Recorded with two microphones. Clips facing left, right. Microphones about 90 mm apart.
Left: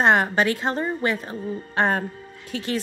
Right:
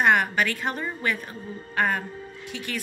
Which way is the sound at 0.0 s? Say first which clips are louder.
Left 3 dB; 30° left (ahead or behind).